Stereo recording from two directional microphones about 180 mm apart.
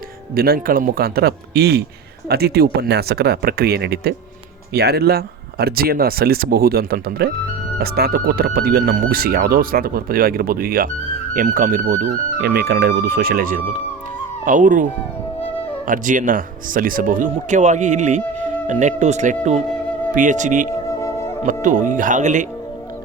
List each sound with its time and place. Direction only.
0.3 s speech: 55° right (ahead or behind)
15.9 s speech: 45° right (ahead or behind)
21.0 s music: 15° left (ahead or behind)
21.4 s speech: 45° right (ahead or behind)